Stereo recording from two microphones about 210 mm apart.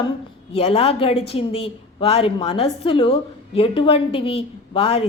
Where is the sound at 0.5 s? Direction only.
25° left (ahead or behind).